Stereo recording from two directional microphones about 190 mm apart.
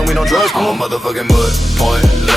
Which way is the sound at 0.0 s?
Centre (ahead or behind).